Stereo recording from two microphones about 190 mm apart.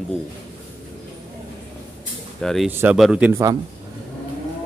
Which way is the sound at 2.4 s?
Centre (ahead or behind).